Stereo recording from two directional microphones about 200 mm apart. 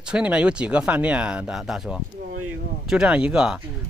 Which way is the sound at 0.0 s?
5° right (ahead or behind).